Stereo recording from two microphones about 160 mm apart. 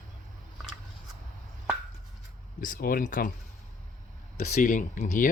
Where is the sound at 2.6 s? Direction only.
60° left (ahead or behind).